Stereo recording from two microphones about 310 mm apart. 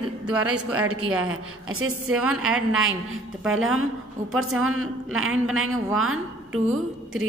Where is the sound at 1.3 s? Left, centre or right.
Right.